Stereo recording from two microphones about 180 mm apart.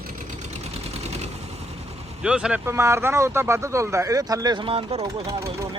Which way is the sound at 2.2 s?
5° right (ahead or behind).